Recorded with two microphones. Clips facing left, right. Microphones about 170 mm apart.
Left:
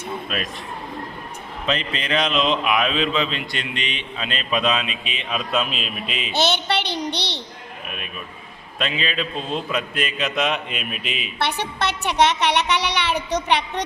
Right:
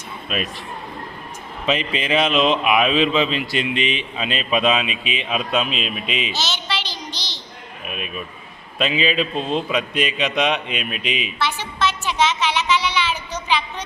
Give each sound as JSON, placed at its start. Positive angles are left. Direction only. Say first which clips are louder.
{"t": 0.3, "sound": "speech", "louder": "right 4 dB", "side_deg": -5}
{"t": 1.6, "sound": "speech", "louder": "right 3 dB", "side_deg": -5}
{"t": 6.3, "sound": "a sound", "louder": "left 6 dB", "side_deg": 60}
{"t": 8.8, "sound": "speech", "louder": "right 5 dB", "side_deg": -5}
{"t": 11.3, "sound": "a child's voice", "louder": "even", "side_deg": 60}